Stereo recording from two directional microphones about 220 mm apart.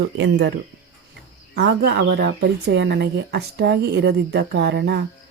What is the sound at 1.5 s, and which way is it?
Speech, 50° right (ahead or behind).